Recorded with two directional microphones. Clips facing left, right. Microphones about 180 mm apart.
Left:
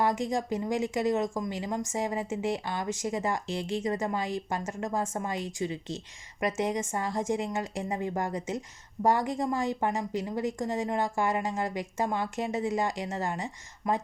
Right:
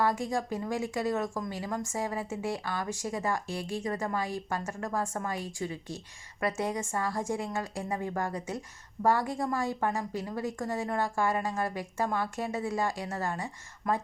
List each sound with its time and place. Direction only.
0.0 s a woman's voice: 20° left (ahead or behind)